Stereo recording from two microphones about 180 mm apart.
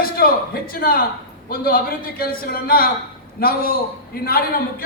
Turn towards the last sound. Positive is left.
turn(degrees=55)  # may be behind; listen again after turning